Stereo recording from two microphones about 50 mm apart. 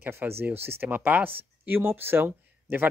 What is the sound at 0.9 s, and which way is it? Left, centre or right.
Speech, right.